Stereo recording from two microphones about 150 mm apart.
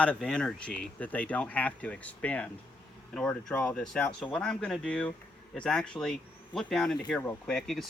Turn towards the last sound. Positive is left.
turn(degrees=0)  # may be behind; listen again after turning